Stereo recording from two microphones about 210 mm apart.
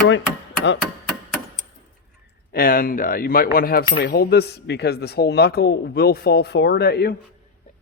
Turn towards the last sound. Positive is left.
turn(degrees=50)  # may be behind; listen again after turning